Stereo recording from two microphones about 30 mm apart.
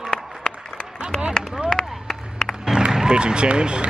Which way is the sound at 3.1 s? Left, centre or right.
Right.